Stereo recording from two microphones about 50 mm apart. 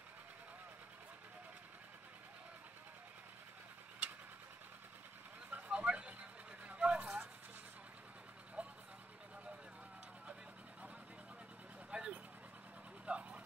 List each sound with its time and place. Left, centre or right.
5.5 s a sound: right
6.7 s vehicle: right
8.6 s vehicle: right
11.9 s vehicle: right